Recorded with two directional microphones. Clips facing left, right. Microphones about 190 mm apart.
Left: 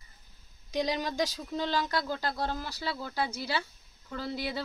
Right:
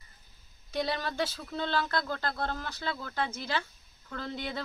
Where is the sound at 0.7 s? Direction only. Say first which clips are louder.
Left 2 dB; 15° left (ahead or behind).